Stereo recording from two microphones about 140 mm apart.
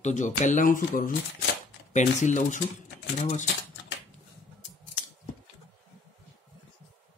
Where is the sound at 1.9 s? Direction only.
60° left (ahead or behind).